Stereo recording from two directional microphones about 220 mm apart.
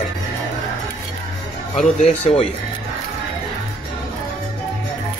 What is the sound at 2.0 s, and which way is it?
Speech, 30° left (ahead or behind).